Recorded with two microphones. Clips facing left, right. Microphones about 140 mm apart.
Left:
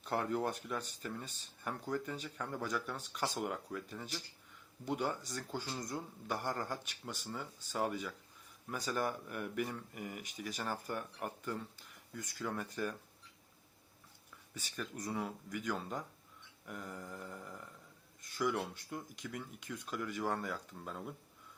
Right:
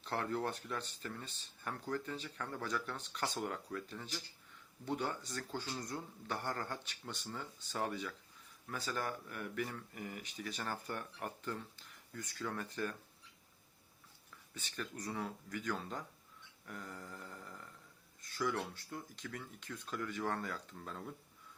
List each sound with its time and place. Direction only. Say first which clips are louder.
0.0 s speech: left 2 dB; 15° left (ahead or behind)
14.9 s speech: left 3 dB; 10° left (ahead or behind)